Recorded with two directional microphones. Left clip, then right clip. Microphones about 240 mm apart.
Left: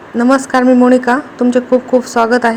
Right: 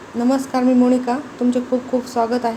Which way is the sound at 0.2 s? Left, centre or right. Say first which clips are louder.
Left 8 dB; left.